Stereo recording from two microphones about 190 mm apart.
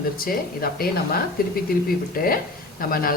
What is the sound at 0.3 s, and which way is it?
Speech, 50° left (ahead or behind).